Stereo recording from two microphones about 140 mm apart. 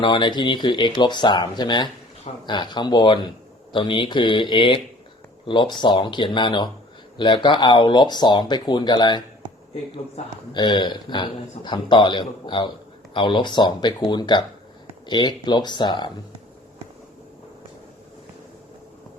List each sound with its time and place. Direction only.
0.0 s a man's voice: 35° left (ahead or behind)
10.5 s a man's voice: 30° left (ahead or behind)